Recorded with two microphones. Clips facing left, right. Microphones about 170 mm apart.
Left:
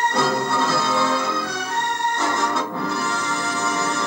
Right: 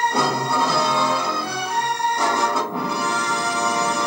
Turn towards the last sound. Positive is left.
turn(degrees=-15)  # may be behind; listen again after turning